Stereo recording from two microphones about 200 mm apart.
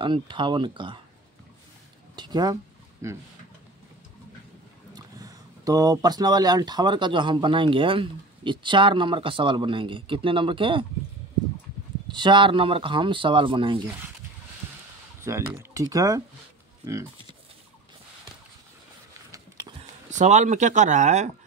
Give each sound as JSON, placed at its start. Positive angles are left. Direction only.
{"t": 0.0, "sound": "speech", "side_deg": -25}
{"t": 2.1, "sound": "a sound", "side_deg": -20}
{"t": 4.9, "sound": "speech", "side_deg": -20}
{"t": 12.1, "sound": "speech", "side_deg": -25}
{"t": 15.2, "sound": "speech", "side_deg": -15}
{"t": 19.3, "sound": "a sound", "side_deg": -15}
{"t": 19.8, "sound": "speech", "side_deg": -35}